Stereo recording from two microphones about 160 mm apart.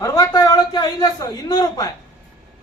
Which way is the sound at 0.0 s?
20° left (ahead or behind).